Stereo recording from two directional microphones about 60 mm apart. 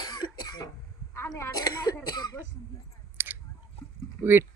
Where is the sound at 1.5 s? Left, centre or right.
Left.